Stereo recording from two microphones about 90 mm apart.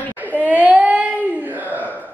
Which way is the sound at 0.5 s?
20° right (ahead or behind).